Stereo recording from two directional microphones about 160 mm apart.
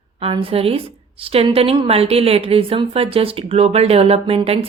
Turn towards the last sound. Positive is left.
turn(degrees=-35)  # may be behind; listen again after turning